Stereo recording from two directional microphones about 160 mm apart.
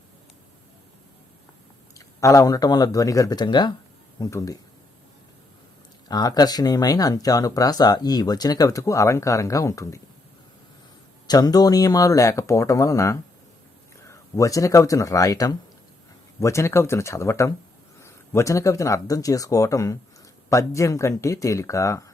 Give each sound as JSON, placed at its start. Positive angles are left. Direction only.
{"t": 2.0, "sound": "speech", "side_deg": 20}
{"t": 6.1, "sound": "speech", "side_deg": 25}
{"t": 11.3, "sound": "speech", "side_deg": 25}